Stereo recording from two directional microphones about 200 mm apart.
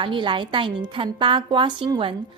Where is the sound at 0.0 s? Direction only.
25° right (ahead or behind).